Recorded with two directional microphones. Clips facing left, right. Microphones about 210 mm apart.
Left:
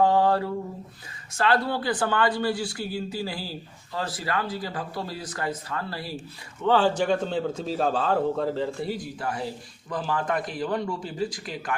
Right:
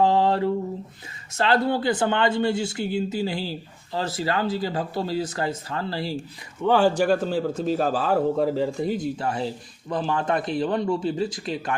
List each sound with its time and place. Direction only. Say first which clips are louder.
0.0 s mantra: right 1 dB; 25° right (ahead or behind)
1.3 s speech: right 3 dB; 25° right (ahead or behind)
6.6 s a man's voice: right 2 dB; 10° right (ahead or behind)